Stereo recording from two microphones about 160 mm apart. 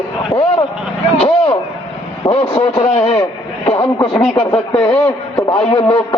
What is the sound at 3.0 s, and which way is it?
Speech, 35° left (ahead or behind).